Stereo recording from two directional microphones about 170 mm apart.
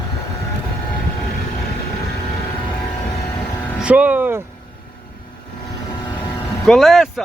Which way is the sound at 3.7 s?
5° right (ahead or behind).